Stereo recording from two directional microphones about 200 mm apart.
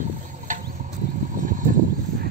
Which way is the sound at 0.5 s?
40° right (ahead or behind).